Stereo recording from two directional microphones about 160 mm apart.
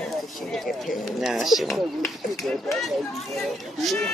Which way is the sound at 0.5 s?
Centre (ahead or behind).